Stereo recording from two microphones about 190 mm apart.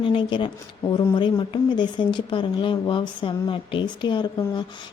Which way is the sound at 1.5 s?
25° left (ahead or behind).